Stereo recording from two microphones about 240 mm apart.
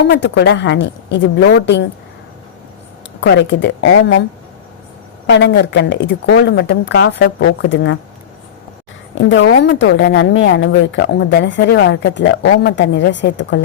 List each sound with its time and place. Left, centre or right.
0.0 s speech: left
3.2 s speech: left
9.1 s speech: left